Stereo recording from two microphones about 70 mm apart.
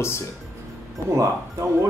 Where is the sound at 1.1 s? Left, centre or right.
Right.